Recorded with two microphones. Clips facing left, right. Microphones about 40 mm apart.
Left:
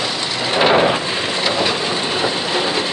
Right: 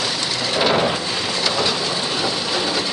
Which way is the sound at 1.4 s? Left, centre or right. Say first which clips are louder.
Left 2 dB; left.